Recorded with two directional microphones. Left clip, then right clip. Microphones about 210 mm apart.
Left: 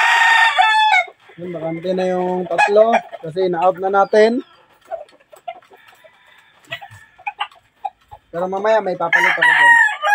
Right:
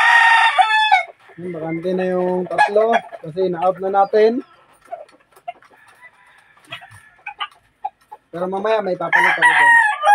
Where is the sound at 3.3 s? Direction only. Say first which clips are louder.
Left 2 dB; 35° left (ahead or behind).